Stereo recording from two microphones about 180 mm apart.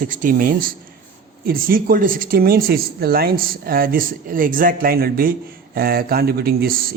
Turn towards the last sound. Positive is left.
turn(degrees=-55)  # may be behind; listen again after turning